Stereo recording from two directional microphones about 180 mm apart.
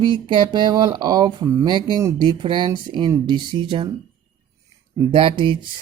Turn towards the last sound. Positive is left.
turn(degrees=-30)  # may be behind; listen again after turning